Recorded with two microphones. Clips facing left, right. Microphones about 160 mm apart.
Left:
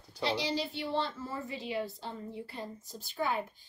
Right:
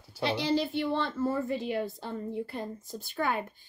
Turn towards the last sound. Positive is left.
turn(degrees=-60)  # may be behind; listen again after turning